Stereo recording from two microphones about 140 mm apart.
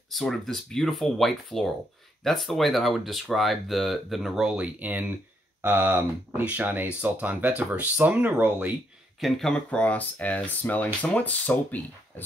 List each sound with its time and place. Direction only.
0.1 s speech: centre (ahead or behind)
9.2 s speech: 5° left (ahead or behind)